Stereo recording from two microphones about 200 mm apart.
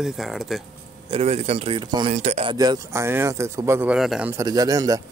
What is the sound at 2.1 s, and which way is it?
Speech, 35° right (ahead or behind).